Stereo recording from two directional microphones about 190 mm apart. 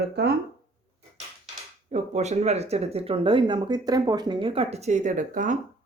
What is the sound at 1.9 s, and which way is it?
Speech, 35° right (ahead or behind).